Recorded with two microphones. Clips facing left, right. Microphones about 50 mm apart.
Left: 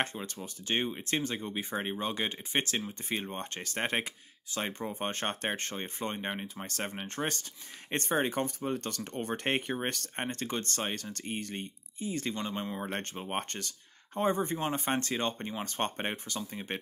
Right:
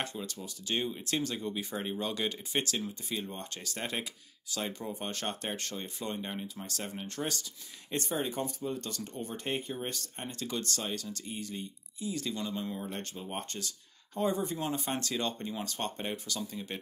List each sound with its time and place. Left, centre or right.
0.0 s speech: left